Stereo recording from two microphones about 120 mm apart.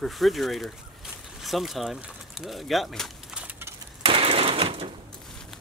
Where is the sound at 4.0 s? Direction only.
50° right (ahead or behind).